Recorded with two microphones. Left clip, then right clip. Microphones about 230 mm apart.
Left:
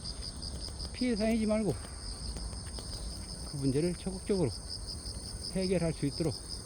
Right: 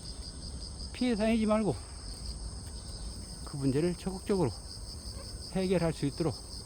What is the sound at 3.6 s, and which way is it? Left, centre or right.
Speech, centre.